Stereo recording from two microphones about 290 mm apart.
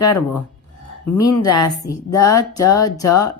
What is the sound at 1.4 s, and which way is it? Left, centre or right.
Speech, centre.